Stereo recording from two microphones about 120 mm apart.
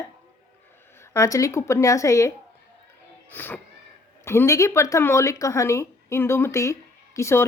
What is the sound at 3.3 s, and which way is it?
A woman's voice, 15° left (ahead or behind).